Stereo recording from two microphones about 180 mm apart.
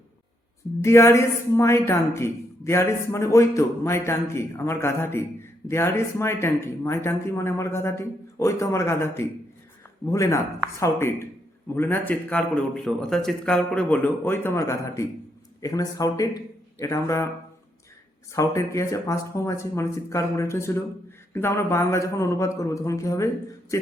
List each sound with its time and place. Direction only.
0.8 s a woman's voice: 15° left (ahead or behind)
18.3 s a woman's voice: 15° left (ahead or behind)